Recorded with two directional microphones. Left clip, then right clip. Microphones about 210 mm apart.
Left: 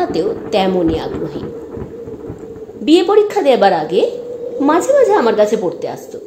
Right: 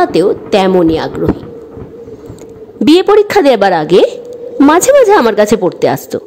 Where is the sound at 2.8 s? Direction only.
55° right (ahead or behind).